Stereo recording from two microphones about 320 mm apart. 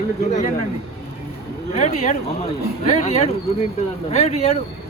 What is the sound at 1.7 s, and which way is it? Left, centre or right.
Speech, centre.